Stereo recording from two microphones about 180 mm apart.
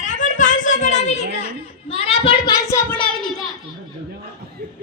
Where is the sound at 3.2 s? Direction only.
Centre (ahead or behind).